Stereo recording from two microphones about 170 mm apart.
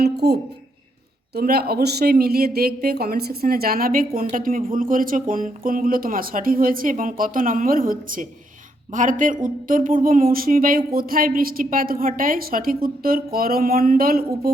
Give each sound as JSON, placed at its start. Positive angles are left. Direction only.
{"t": 0.0, "sound": "speech", "side_deg": -75}
{"t": 1.4, "sound": "speech", "side_deg": -65}